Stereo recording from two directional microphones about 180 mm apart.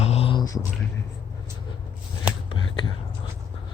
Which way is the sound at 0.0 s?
35° left (ahead or behind).